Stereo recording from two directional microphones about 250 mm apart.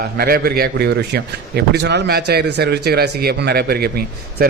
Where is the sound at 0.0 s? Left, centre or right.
Right.